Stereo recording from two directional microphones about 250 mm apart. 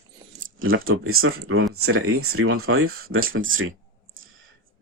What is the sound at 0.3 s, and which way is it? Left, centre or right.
Speech, right.